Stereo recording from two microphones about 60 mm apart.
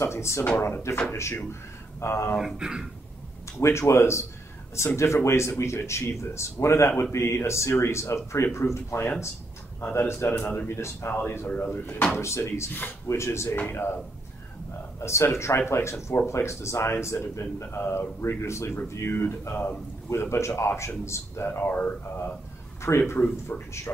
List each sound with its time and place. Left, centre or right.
0.0 s speech: left
2.4 s speech: centre
3.5 s speech: left
11.5 s speech: left
12.2 s speech: left
15.0 s speech: left
17.6 s speech: left
20.1 s speech: left
21.5 s speech: left
23.5 s a man's voice: left